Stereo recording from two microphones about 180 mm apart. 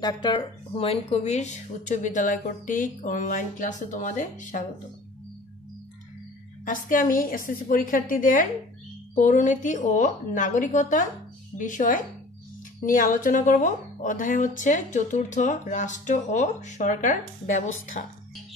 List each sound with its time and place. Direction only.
0.0 s a woman's voice: 25° left (ahead or behind); by 4.6 s 45° left (ahead or behind)
6.6 s a woman's voice: 50° left (ahead or behind)